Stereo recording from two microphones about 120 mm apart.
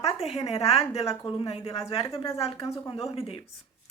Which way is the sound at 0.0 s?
60° left (ahead or behind).